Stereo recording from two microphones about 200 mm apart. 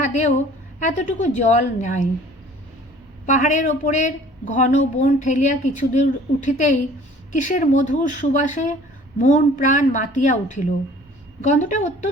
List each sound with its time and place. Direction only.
0.0 s a woman's voice: 35° left (ahead or behind)
3.2 s a woman's voice: 40° left (ahead or behind)